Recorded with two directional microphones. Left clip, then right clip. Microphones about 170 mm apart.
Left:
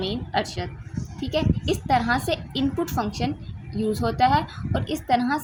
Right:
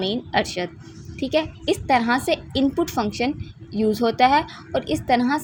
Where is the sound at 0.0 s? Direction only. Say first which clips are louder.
Right 4 dB; 45° right (ahead or behind).